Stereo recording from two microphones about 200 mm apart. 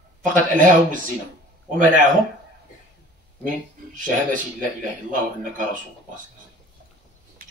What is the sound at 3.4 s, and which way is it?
Speech, 40° right (ahead or behind).